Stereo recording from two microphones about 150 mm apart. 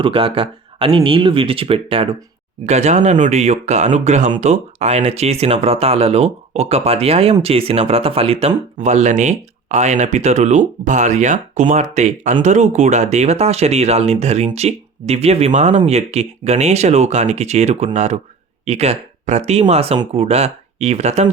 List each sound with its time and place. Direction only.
0.0 s speech: 35° right (ahead or behind)
2.6 s speech: 50° right (ahead or behind)